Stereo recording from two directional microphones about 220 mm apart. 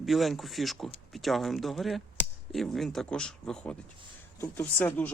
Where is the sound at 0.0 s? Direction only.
Centre (ahead or behind).